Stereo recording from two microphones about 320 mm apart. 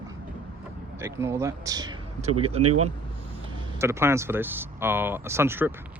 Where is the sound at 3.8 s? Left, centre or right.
Centre.